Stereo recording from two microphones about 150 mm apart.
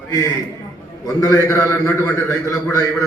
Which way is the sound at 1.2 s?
20° left (ahead or behind).